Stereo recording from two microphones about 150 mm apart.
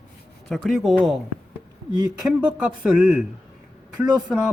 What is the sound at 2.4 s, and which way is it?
Speech, 5° right (ahead or behind).